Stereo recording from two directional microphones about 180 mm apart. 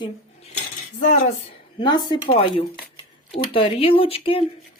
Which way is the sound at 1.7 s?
25° left (ahead or behind).